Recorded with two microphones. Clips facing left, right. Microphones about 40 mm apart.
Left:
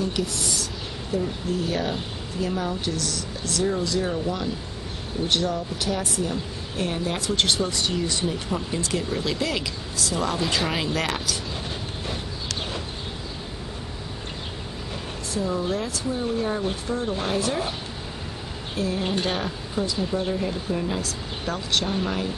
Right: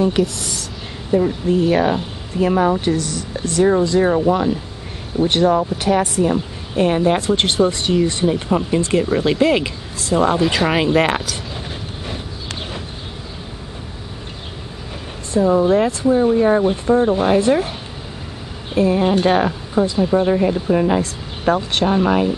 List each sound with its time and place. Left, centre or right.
0.2 s speech: centre
1.1 s speech: right
5.2 s speech: right
15.3 s a woman's voice: right
18.8 s speech: right